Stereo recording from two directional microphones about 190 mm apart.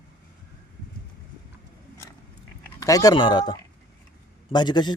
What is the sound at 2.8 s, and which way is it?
A man's voice, 20° left (ahead or behind).